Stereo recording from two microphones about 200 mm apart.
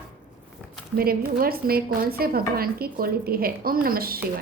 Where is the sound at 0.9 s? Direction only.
50° right (ahead or behind).